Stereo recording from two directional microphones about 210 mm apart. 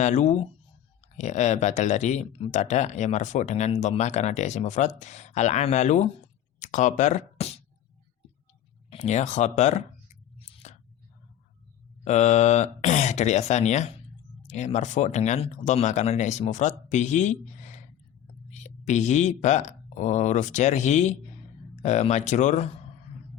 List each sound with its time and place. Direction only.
0.0 s speech: 35° left (ahead or behind)
8.9 s speech: 35° left (ahead or behind)
10.6 s whispering: 35° left (ahead or behind)
12.0 s speech: 35° left (ahead or behind)